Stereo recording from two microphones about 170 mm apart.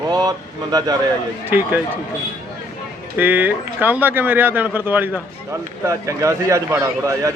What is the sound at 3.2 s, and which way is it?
Speech, 10° right (ahead or behind).